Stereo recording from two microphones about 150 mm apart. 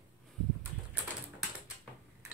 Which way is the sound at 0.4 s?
5° left (ahead or behind).